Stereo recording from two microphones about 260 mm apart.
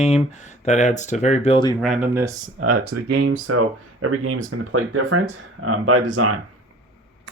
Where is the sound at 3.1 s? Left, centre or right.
Right.